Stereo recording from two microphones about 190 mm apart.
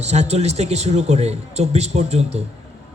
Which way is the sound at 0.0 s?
35° right (ahead or behind).